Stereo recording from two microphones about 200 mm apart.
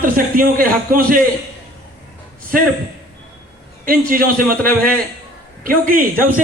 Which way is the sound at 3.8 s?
45° right (ahead or behind).